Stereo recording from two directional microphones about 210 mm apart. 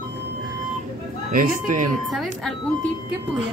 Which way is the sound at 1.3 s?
40° right (ahead or behind).